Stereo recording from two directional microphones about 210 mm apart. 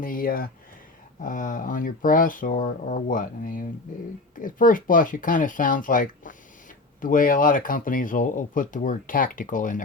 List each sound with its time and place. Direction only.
0.0 s speech: 40° left (ahead or behind)